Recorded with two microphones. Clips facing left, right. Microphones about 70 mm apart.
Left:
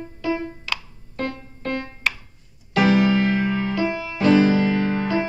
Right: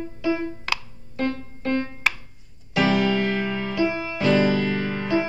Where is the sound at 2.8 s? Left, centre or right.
Centre.